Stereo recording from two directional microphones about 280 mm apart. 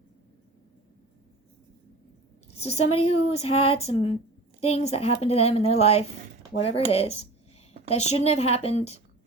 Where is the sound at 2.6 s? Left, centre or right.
Left.